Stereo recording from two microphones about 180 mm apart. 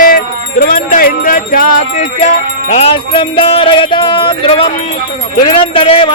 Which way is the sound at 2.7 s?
30° left (ahead or behind).